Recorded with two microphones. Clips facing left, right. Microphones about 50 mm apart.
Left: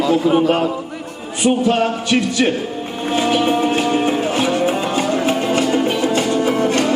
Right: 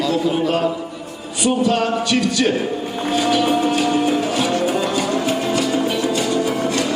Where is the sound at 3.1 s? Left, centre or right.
Left.